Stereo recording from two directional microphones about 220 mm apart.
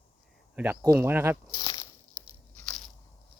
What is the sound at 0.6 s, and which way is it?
Speech, 10° right (ahead or behind).